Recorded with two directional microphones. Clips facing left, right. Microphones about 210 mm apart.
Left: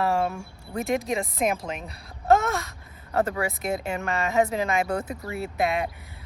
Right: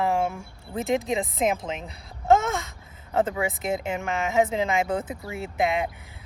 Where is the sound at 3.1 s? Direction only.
20° right (ahead or behind).